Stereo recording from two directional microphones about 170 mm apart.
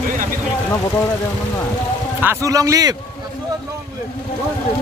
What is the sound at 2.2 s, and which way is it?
Speech, 20° right (ahead or behind).